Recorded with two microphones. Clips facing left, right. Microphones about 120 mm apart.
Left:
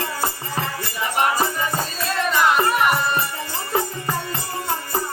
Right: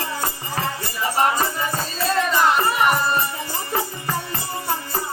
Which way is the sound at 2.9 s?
40° right (ahead or behind).